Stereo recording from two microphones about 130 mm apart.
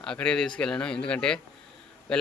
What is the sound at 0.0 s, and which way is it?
A man's voice, 5° left (ahead or behind).